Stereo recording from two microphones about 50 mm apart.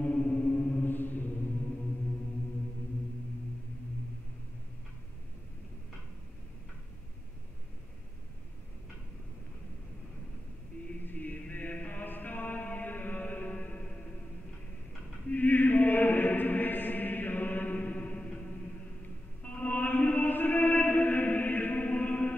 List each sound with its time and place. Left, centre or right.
0.0 s music: left
0.8 s music: left
11.1 s music: left
15.2 s chant: left
19.4 s music: left